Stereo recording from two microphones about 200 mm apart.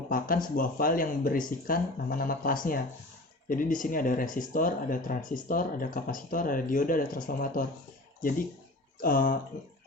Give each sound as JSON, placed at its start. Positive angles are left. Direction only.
{"t": 0.5, "sound": "speech", "side_deg": 45}
{"t": 9.0, "sound": "speech", "side_deg": 45}